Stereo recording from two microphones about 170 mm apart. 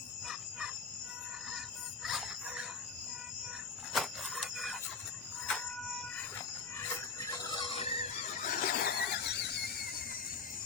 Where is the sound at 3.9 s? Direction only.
Centre (ahead or behind).